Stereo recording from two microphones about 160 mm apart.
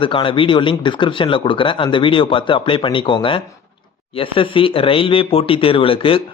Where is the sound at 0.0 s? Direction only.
30° left (ahead or behind).